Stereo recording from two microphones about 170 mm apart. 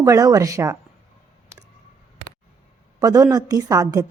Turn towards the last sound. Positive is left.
turn(degrees=-20)  # may be behind; listen again after turning